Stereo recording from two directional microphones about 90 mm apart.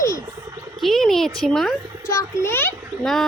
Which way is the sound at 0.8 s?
5° left (ahead or behind).